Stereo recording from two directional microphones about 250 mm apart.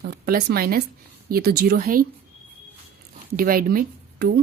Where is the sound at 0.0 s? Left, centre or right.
Right.